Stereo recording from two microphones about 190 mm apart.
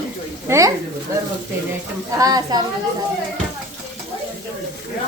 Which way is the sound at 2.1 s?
20° right (ahead or behind).